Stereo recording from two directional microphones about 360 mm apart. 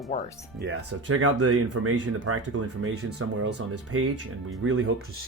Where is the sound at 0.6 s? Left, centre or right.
Right.